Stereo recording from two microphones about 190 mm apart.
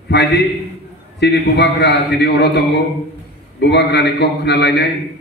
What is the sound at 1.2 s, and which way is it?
A man's voice, 60° left (ahead or behind).